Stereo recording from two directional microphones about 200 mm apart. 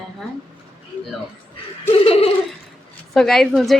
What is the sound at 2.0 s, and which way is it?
Laughter, 30° left (ahead or behind).